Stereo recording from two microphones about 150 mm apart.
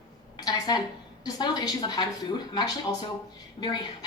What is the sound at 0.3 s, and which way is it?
A woman's voice, 25° left (ahead or behind).